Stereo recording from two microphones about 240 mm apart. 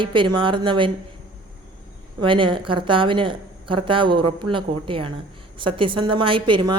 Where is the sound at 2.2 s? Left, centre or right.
Right.